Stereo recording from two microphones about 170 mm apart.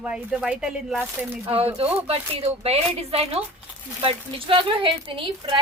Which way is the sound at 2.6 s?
35° right (ahead or behind).